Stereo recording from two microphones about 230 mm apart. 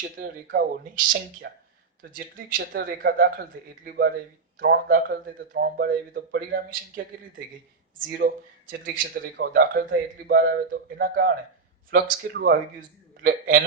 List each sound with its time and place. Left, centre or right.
0.9 s speech: right
2.6 s speech: right